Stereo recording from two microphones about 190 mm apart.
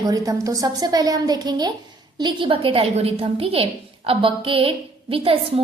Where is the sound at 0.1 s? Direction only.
20° right (ahead or behind).